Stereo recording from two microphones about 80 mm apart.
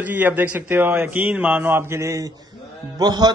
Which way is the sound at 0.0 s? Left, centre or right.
Right.